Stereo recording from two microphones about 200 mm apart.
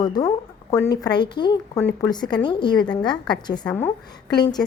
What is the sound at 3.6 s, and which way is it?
Speech, 5° left (ahead or behind).